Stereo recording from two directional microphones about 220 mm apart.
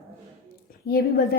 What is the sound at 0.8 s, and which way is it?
Speech, 45° left (ahead or behind).